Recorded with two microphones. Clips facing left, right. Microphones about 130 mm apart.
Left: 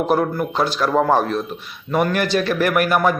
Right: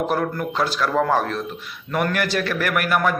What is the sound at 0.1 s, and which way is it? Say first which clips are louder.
A man's voice: left 4 dB; 20° left (ahead or behind).